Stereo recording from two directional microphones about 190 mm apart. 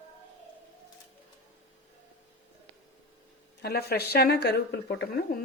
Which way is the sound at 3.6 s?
55° left (ahead or behind).